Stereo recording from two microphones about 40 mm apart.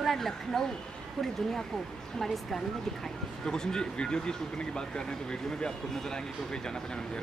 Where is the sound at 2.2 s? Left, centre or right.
Centre.